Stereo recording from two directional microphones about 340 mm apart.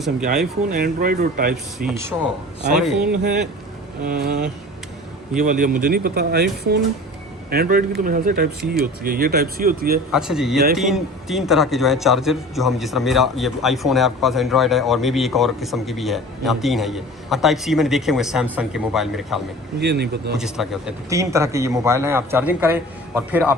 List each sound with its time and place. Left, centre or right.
0.7 s speech: right
2.7 s a man's voice: centre
4.0 s speech: right
10.1 s a man's voice: centre
19.8 s speech: right
20.3 s a man's voice: centre